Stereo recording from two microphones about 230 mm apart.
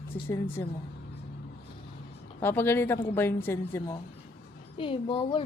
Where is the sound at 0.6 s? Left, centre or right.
Centre.